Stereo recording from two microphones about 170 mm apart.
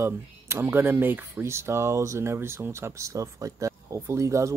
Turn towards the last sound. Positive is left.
turn(degrees=-20)  # may be behind; listen again after turning